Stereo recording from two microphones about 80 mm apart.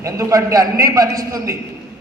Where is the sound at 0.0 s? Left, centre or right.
Right.